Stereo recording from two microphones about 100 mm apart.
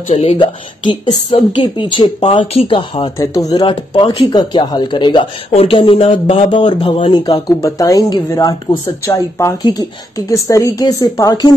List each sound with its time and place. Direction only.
0.1 s speech: 90° left
1.3 s speech: 55° left (ahead or behind); by 2.8 s 75° left (ahead or behind)
2.8 s speech: 55° left (ahead or behind)
3.2 s a woman's voice: 35° left (ahead or behind)
3.6 s speech: 50° left (ahead or behind)
5.5 s speech: 75° left (ahead or behind); by 7.4 s 60° left (ahead or behind)
7.4 s a woman's voice: 35° left (ahead or behind)